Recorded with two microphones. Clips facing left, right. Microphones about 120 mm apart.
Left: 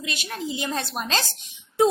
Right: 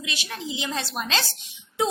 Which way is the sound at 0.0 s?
50° left (ahead or behind).